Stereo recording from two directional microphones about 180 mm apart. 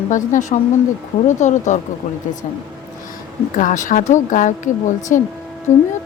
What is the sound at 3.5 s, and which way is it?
Speech, 45° left (ahead or behind).